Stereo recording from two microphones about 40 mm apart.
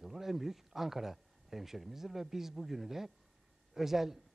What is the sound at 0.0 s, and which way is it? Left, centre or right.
A man's voice, centre.